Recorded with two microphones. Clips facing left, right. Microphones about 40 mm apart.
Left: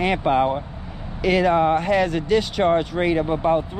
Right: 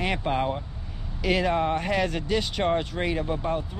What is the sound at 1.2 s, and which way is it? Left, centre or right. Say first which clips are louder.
Speech: left 6 dB; centre.